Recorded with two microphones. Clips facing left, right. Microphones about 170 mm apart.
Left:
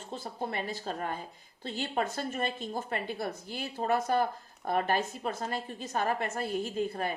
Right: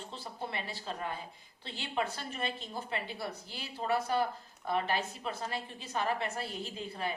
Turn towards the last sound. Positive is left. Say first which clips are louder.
# left 6 dB
turn(degrees=50)  # may be behind; listen again after turning